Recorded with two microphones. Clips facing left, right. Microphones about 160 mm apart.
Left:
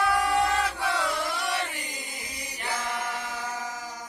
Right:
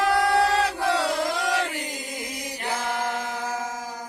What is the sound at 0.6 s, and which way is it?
Battle cry, 40° right (ahead or behind).